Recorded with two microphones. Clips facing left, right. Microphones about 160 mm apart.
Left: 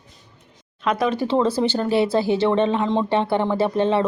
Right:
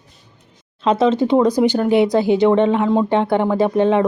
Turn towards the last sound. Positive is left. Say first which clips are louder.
# right 4 dB
turn(degrees=-15)  # may be behind; listen again after turning